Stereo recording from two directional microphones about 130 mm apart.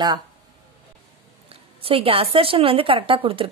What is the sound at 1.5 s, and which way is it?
Speech, 45° right (ahead or behind).